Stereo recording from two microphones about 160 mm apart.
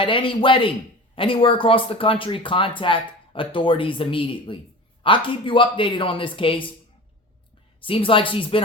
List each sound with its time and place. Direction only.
0.0 s speech: 35° left (ahead or behind)
7.8 s speech: 35° left (ahead or behind)